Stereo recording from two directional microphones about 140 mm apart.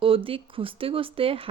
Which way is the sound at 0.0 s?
40° right (ahead or behind).